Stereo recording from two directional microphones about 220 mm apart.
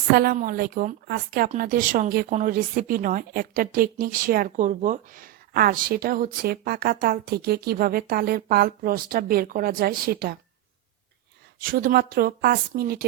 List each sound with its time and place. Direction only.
0.1 s a woman's voice: 45° right (ahead or behind)
11.6 s speech: 40° right (ahead or behind)